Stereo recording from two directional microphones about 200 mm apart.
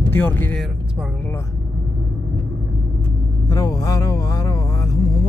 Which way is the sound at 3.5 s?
20° left (ahead or behind).